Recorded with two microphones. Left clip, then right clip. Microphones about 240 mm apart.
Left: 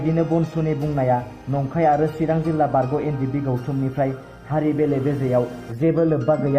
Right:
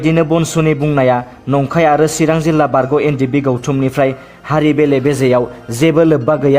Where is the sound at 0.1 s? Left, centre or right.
Right.